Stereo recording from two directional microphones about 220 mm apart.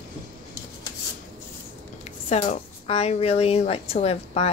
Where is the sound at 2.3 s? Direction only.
30° left (ahead or behind).